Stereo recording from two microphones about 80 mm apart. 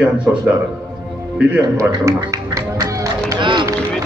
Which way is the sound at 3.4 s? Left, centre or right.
Right.